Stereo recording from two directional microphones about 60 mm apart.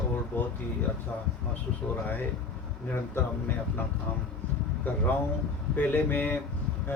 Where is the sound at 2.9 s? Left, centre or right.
Left.